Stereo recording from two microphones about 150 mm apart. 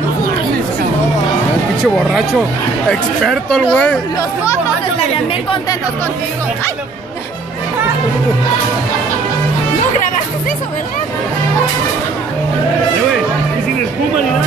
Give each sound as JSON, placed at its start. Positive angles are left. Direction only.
{"t": 2.9, "sound": "speech", "side_deg": 5}
{"t": 5.1, "sound": "speech", "side_deg": 35}